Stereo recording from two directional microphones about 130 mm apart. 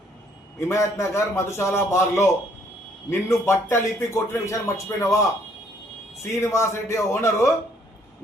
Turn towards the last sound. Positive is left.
turn(degrees=20)  # may be behind; listen again after turning